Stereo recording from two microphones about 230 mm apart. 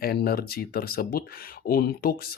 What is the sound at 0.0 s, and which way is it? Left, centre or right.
Speech, left.